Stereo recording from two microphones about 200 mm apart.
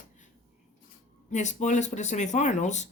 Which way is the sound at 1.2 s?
35° left (ahead or behind).